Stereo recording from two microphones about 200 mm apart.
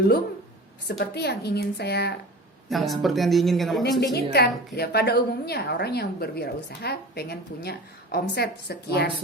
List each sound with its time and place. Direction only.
0.9 s speech: 55° left (ahead or behind)
2.6 s speech: centre (ahead or behind)
4.1 s a woman's voice: 55° left (ahead or behind)